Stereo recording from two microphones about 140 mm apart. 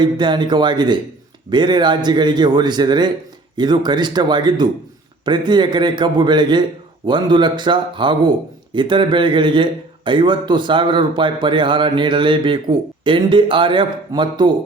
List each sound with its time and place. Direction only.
0.0 s a man's voice: 35° right (ahead or behind)